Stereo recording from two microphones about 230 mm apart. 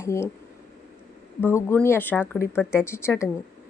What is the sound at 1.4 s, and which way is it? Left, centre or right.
Speech, centre.